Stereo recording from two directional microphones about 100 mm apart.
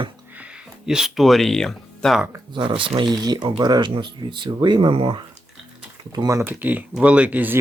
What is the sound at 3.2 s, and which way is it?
Speech, 45° right (ahead or behind).